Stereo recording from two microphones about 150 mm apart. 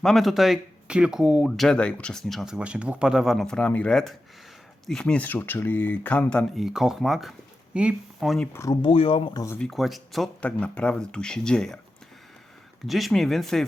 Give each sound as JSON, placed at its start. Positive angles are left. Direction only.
{"t": 0.0, "sound": "speech", "side_deg": 0}
{"t": 6.6, "sound": "speech", "side_deg": -5}
{"t": 8.5, "sound": "speech", "side_deg": 20}
{"t": 8.8, "sound": "speech", "side_deg": 40}
{"t": 9.6, "sound": "speech", "side_deg": 0}
{"t": 12.8, "sound": "speech", "side_deg": 0}